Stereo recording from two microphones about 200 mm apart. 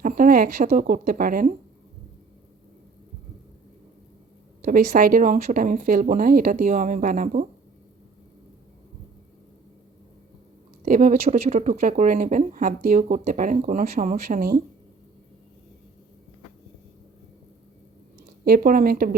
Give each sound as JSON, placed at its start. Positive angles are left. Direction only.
{"t": 0.0, "sound": "speech", "side_deg": -40}
{"t": 4.6, "sound": "speech", "side_deg": -50}
{"t": 10.8, "sound": "speech", "side_deg": -40}
{"t": 18.4, "sound": "speech", "side_deg": -45}